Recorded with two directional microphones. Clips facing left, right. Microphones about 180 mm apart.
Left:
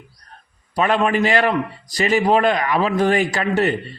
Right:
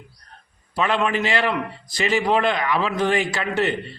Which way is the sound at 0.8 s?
45° left (ahead or behind).